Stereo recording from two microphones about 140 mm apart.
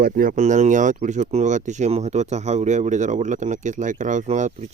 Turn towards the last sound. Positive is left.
turn(degrees=-60)  # may be behind; listen again after turning